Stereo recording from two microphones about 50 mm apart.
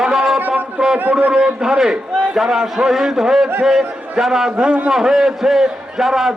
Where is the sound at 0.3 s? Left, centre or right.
Right.